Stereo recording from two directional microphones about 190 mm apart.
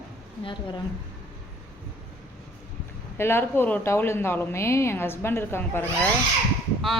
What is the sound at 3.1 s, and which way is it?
A woman's voice, 10° left (ahead or behind).